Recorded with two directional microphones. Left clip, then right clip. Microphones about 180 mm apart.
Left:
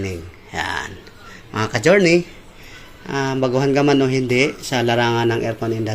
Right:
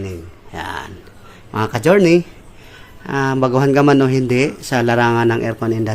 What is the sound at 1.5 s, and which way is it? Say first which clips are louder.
Speech: right 1 dB; 25° right (ahead or behind).